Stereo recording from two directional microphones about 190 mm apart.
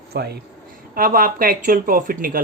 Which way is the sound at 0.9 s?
50° right (ahead or behind).